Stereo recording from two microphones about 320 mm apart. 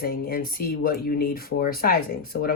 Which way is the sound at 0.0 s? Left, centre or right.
Left.